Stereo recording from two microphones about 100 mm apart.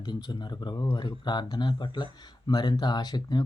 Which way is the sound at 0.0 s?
45° left (ahead or behind).